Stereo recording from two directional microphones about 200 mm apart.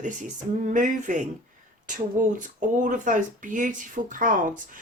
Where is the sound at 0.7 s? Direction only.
40° right (ahead or behind).